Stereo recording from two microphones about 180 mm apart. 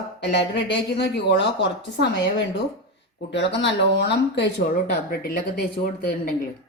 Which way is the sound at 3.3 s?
80° left.